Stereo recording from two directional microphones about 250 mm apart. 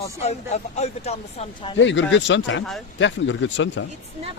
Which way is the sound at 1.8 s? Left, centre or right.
Left.